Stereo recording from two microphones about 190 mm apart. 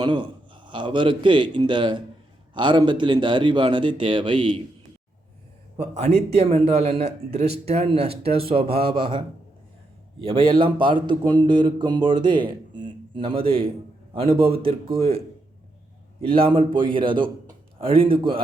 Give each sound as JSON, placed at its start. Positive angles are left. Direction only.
{"t": 0.0, "sound": "a man's voice", "side_deg": -25}
{"t": 5.7, "sound": "a man's voice", "side_deg": -35}
{"t": 16.2, "sound": "a man's voice", "side_deg": -30}